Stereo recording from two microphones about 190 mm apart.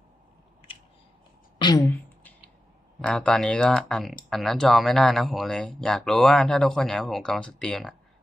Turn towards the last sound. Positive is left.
turn(degrees=0)  # may be behind; listen again after turning